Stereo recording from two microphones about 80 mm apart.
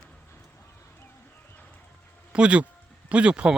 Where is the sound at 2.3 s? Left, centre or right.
Centre.